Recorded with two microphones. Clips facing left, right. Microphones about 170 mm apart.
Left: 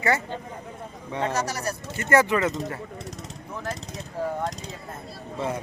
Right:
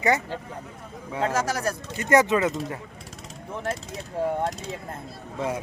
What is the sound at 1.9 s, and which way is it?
Speech, 15° right (ahead or behind).